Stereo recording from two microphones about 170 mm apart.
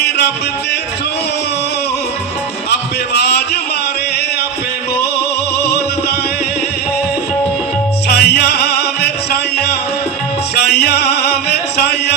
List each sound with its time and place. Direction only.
2.6 s a man's voice: 75° left (ahead or behind)
8.0 s music: 70° left (ahead or behind)
10.5 s music: 75° left (ahead or behind)